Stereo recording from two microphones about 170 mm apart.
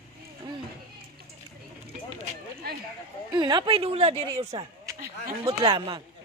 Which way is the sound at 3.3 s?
25° right (ahead or behind).